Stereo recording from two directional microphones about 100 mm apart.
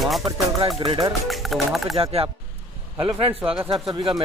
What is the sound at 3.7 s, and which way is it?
Speech, 55° right (ahead or behind).